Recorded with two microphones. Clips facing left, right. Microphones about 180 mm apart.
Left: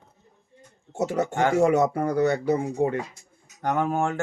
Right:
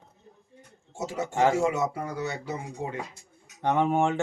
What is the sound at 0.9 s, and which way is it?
Speech, 60° left (ahead or behind).